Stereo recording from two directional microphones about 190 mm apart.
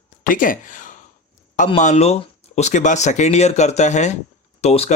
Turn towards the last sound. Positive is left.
turn(degrees=35)  # may be behind; listen again after turning